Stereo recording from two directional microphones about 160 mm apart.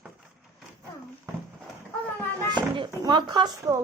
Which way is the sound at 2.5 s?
30° right (ahead or behind).